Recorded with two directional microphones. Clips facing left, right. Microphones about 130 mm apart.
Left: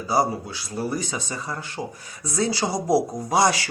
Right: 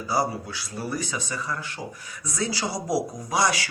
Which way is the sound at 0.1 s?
25° left (ahead or behind).